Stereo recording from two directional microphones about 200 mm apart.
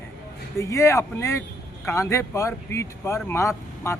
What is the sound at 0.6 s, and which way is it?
Speech, 15° left (ahead or behind).